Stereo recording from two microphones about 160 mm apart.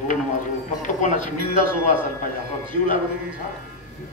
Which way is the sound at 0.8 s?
50° left (ahead or behind).